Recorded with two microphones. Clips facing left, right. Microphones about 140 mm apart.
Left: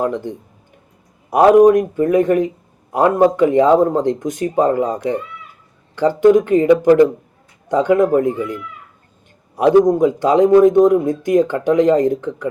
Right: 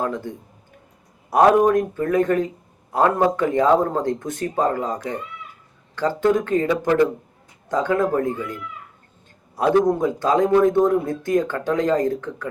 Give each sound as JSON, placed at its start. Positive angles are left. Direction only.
{"t": 0.0, "sound": "speech", "side_deg": 20}
{"t": 6.0, "sound": "speech", "side_deg": 15}
{"t": 9.6, "sound": "speech", "side_deg": 15}